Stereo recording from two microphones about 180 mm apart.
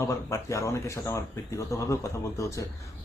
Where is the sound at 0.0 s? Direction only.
15° left (ahead or behind).